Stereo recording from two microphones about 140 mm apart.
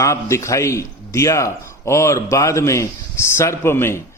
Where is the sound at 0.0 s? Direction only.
20° left (ahead or behind).